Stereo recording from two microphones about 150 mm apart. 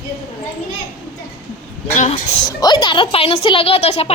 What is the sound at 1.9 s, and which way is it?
Speech, 50° left (ahead or behind).